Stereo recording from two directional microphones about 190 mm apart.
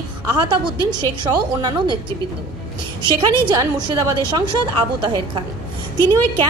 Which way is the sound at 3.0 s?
25° right (ahead or behind).